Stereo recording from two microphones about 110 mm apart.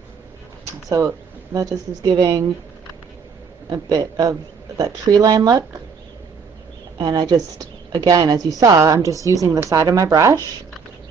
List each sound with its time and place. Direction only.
0.8 s a woman's voice: 30° right (ahead or behind)
3.6 s a woman's voice: 35° right (ahead or behind)
7.0 s a woman's voice: 40° right (ahead or behind)